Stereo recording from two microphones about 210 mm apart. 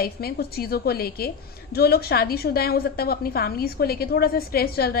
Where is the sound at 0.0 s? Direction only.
45° left (ahead or behind).